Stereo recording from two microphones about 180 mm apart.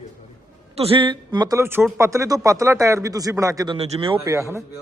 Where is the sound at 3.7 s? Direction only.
30° right (ahead or behind).